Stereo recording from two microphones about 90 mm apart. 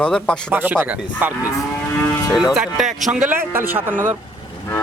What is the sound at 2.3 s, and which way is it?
Speech, 5° right (ahead or behind).